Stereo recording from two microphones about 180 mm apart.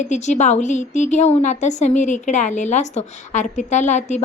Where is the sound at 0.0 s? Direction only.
40° left (ahead or behind).